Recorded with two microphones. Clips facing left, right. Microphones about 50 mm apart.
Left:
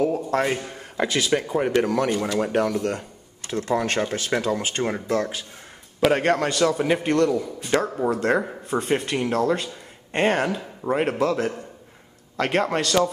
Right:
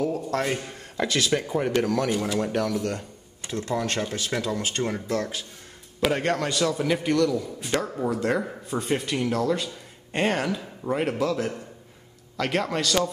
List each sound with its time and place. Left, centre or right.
0.1 s a man's voice: centre
2.1 s speech: centre
2.4 s a man's voice: centre
7.0 s a man's voice: left
10.1 s speech: left
11.1 s a man's voice: left
12.5 s speech: left